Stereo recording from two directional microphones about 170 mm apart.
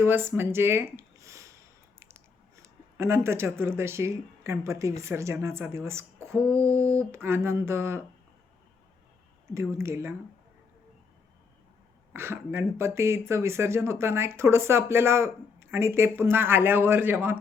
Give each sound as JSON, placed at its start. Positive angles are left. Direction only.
{"t": 0.0, "sound": "a sound", "side_deg": -15}
{"t": 3.0, "sound": "speech", "side_deg": -15}
{"t": 9.6, "sound": "speech", "side_deg": -15}
{"t": 12.1, "sound": "speech", "side_deg": -15}